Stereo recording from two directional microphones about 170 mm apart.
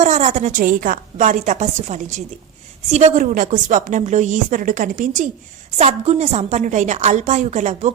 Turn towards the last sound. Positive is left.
turn(degrees=-45)  # may be behind; listen again after turning